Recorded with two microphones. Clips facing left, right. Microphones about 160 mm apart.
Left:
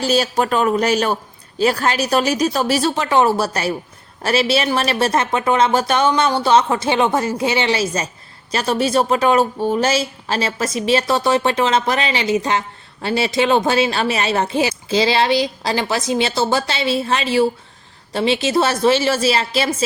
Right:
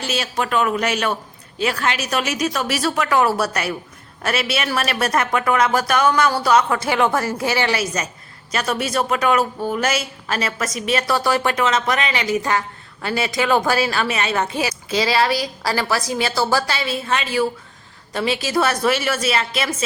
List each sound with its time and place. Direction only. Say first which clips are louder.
0.0 s a man's voice: left 6 dB; 35° left (ahead or behind)